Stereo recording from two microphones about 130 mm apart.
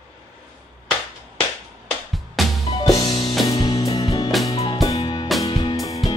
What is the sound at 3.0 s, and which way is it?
Music, 35° left (ahead or behind).